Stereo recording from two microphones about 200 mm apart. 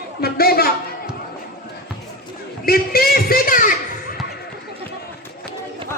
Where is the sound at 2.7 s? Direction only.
50° left (ahead or behind).